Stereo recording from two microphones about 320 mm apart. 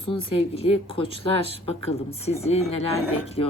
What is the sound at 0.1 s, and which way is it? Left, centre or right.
Speech, centre.